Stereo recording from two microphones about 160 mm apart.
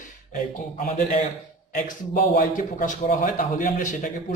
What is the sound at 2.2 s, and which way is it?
A man's voice, 60° left (ahead or behind).